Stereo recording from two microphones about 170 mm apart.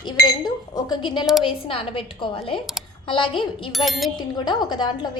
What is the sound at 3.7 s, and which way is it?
Music, centre (ahead or behind).